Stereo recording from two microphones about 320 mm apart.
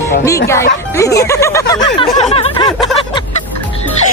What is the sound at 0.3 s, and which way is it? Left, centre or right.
Speech, centre.